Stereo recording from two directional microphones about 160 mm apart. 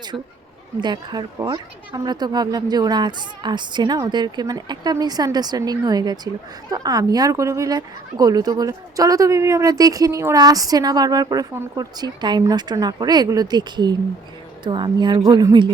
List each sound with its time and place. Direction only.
0.8 s a woman's voice: 25° right (ahead or behind)